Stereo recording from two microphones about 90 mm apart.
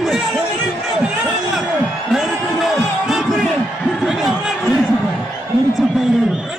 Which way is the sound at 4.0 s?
5° right (ahead or behind).